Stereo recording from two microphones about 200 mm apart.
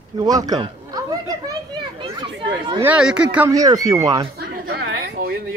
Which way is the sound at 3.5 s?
15° right (ahead or behind).